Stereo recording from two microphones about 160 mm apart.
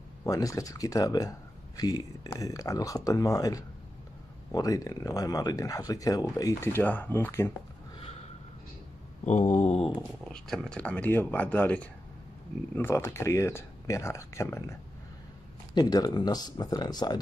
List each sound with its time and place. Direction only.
0.2 s speech: 20° left (ahead or behind)
9.2 s mantra: 50° left (ahead or behind)
9.9 s speech: 5° left (ahead or behind); by 17.2 s 25° left (ahead or behind)